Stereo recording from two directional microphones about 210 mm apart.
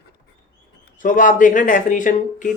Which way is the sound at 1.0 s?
40° left (ahead or behind).